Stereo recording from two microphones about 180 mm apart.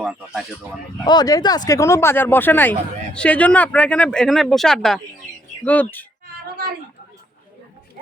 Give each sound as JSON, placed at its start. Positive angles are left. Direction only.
{"t": 0.0, "sound": "speech", "side_deg": 0}
{"t": 1.0, "sound": "speech", "side_deg": 20}